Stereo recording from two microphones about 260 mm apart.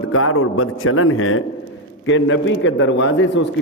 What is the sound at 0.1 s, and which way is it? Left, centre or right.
A man's voice, left.